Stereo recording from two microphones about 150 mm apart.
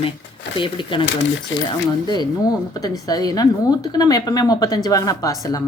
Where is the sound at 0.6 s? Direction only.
35° left (ahead or behind).